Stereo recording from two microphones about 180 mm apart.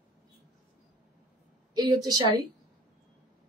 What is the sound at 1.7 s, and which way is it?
Speech, 20° right (ahead or behind).